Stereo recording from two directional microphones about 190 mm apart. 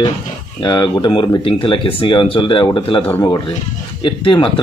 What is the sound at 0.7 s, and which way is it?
Speech, 25° left (ahead or behind).